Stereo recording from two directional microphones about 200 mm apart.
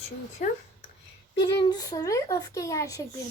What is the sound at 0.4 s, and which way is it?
Speech, 40° left (ahead or behind).